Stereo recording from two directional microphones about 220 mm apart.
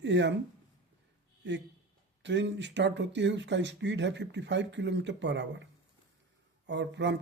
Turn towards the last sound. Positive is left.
turn(degrees=-55)  # may be behind; listen again after turning